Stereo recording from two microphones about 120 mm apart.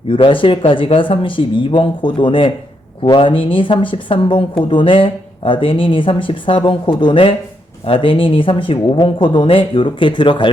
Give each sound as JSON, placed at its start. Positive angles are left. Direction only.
{"t": 0.1, "sound": "speech", "side_deg": 45}